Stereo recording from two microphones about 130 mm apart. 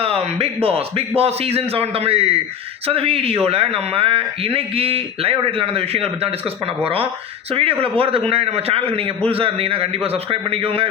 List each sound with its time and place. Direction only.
0.0 s speech: 50° right (ahead or behind)